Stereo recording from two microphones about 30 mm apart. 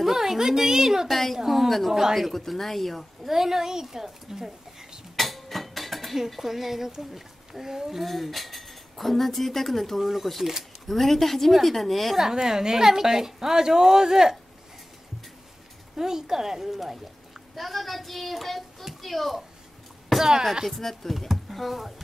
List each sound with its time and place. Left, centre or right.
0.0 s a woman's voice: centre
1.0 s a woman's voice: centre
2.1 s a woman's voice: centre
3.3 s a woman's voice: centre
5.1 s a sound: centre
6.1 s a woman's voice: centre
8.0 s a woman's voice: centre
12.2 s a woman's voice: centre
16.0 s a woman's voice: centre
20.2 s speech: centre
20.6 s a woman's voice: centre